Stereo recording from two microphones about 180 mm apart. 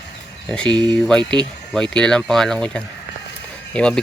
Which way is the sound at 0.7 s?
25° right (ahead or behind).